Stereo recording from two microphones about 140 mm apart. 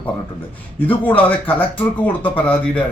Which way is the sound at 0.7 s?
10° left (ahead or behind).